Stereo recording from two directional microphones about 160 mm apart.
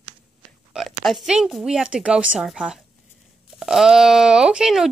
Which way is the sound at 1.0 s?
Centre (ahead or behind).